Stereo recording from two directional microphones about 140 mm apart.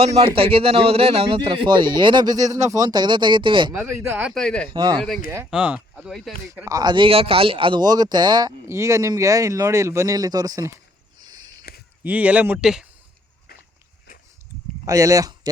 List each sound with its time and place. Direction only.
0.0 s a man's voice: 45° right (ahead or behind)
4.4 s speech: 5° left (ahead or behind)
4.7 s speech: 35° right (ahead or behind)
4.9 s speech: centre (ahead or behind)
6.7 s speech: 30° right (ahead or behind)
11.7 s a sound: 90° left
12.0 s speech: 10° right (ahead or behind)
14.8 s speech: 25° right (ahead or behind)